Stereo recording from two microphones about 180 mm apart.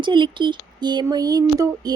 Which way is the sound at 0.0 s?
25° right (ahead or behind).